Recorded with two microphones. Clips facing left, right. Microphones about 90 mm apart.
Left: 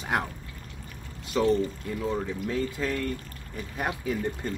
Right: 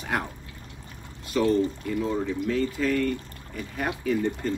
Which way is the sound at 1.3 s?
20° left (ahead or behind).